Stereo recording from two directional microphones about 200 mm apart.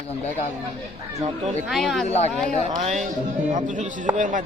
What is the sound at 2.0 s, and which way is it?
Speech, 35° left (ahead or behind).